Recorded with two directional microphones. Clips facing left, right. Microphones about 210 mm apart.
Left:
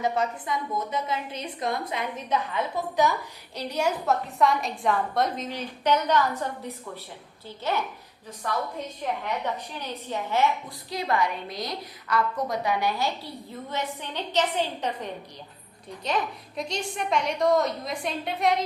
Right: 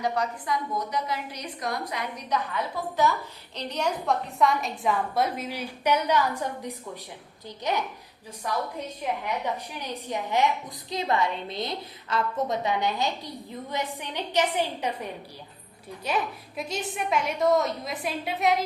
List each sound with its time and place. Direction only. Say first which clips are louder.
0.0 s a woman's voice: left 1 dB; 25° left (ahead or behind); by 8.6 s 15° right (ahead or behind)
9.7 s a woman's voice: even; 15° right (ahead or behind)
16.0 s a woman's voice: even; 5° right (ahead or behind)